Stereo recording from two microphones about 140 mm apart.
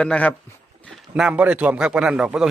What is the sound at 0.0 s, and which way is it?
Speech, 10° left (ahead or behind).